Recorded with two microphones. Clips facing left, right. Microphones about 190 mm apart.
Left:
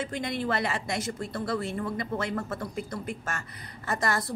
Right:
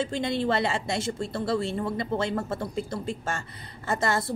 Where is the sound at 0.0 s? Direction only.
30° right (ahead or behind).